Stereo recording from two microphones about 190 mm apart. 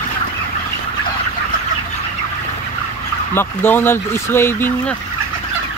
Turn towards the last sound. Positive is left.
turn(degrees=10)  # may be behind; listen again after turning